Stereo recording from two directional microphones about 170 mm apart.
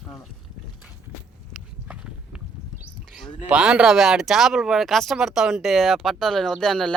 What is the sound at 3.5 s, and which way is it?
Speech, 5° right (ahead or behind).